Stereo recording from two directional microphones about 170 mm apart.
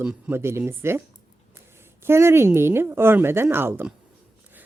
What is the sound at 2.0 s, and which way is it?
Speech, 15° right (ahead or behind).